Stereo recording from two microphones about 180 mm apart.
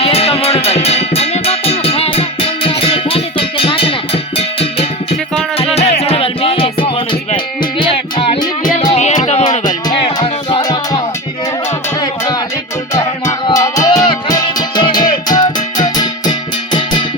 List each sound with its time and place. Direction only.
0.0 s music: 35° left (ahead or behind)
9.0 s music: 40° left (ahead or behind)
9.6 s music: 25° left (ahead or behind)
12.9 s music: 15° left (ahead or behind)